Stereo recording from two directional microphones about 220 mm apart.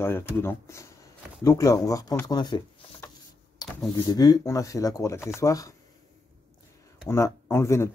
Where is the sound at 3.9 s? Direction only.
15° left (ahead or behind).